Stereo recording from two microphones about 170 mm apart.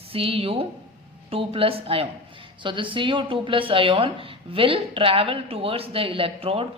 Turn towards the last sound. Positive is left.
turn(degrees=-35)  # may be behind; listen again after turning